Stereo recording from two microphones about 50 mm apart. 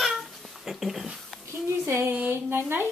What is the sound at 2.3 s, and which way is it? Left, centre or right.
Speech, right.